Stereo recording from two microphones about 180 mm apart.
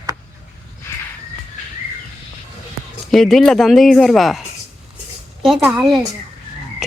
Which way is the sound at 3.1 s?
Centre (ahead or behind).